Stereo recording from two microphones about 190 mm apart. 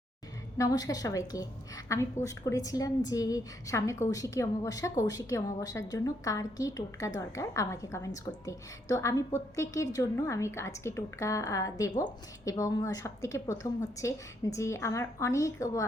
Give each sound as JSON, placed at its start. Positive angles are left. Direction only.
{"t": 0.5, "sound": "a woman's voice", "side_deg": 20}